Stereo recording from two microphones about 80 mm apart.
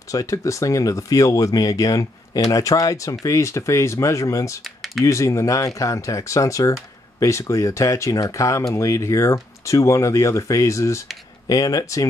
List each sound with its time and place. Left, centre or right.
0.1 s speech: left
4.6 s typing: centre
5.0 s speech: left
11.4 s speech: left